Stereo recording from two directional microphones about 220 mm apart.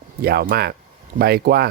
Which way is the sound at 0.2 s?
45° right (ahead or behind).